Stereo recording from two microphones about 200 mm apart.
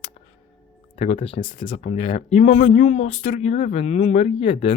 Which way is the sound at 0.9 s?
30° left (ahead or behind).